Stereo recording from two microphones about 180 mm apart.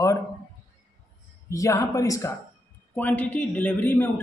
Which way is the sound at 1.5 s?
15° left (ahead or behind).